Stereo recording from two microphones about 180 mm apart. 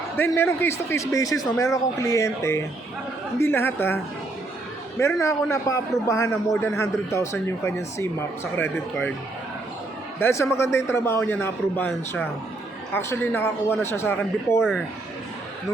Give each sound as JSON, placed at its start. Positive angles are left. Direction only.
{"t": 0.2, "sound": "speech", "side_deg": 10}
{"t": 5.2, "sound": "speech", "side_deg": 15}
{"t": 10.2, "sound": "speech", "side_deg": 15}